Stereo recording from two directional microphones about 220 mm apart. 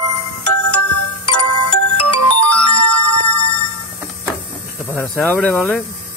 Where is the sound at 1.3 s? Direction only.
90° left.